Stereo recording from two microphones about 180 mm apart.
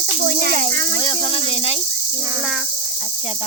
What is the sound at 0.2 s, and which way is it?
Cricket, 65° right (ahead or behind).